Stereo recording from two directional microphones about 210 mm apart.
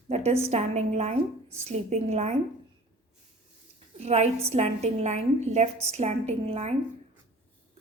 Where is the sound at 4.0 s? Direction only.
30° right (ahead or behind).